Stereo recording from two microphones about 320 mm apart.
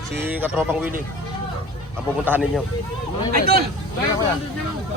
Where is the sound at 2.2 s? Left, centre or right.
Centre.